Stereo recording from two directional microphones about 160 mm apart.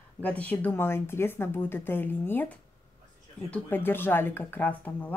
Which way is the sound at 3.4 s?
10° left (ahead or behind).